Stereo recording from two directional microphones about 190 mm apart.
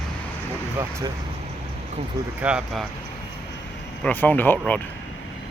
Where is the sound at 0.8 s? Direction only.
15° right (ahead or behind).